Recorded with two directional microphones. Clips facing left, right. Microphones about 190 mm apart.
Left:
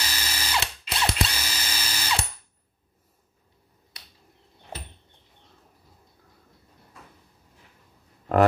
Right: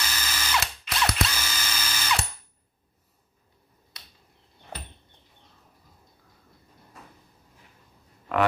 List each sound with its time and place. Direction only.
0.0 s drill: 30° left (ahead or behind)